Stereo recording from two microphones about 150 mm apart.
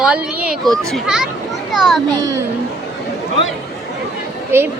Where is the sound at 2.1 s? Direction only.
20° right (ahead or behind).